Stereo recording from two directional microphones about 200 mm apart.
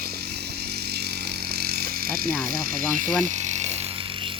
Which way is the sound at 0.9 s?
55° right (ahead or behind).